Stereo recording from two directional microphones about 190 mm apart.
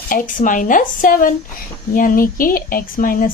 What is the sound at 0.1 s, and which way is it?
A woman's voice, 45° left (ahead or behind).